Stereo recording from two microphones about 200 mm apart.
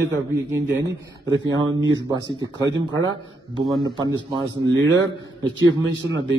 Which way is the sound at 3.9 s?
20° right (ahead or behind).